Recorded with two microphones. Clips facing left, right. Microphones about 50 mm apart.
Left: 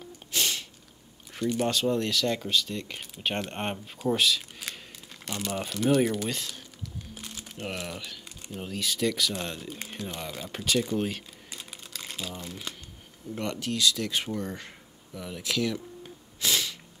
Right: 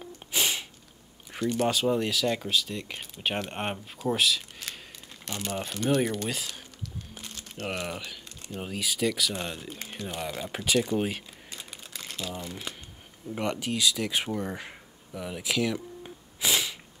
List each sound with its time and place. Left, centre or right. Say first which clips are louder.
0.3 s a sound: right 1 dB; centre
1.3 s speech: right 1 dB; centre
7.2 s music: even; centre
7.6 s speech: right 2 dB; centre
12.0 s crumpling: right 1 dB; centre
12.4 s speech: right 1 dB; centre
15.1 s a sound: right 1 dB; centre